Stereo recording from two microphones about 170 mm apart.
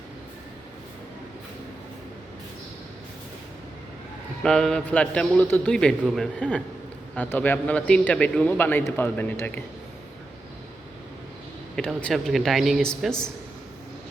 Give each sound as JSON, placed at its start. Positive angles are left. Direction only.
{"t": 4.4, "sound": "a man's voice", "side_deg": 5}
{"t": 11.8, "sound": "a man's voice", "side_deg": 5}